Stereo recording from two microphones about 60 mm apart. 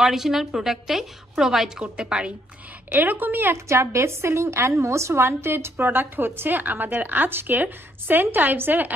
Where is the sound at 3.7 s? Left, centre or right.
Right.